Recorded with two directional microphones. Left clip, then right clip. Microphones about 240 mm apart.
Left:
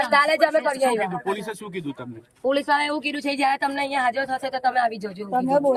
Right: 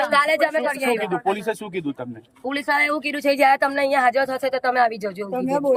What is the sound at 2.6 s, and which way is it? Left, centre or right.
A woman's voice, centre.